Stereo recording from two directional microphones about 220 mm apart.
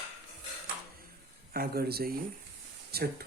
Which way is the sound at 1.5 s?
45° right (ahead or behind).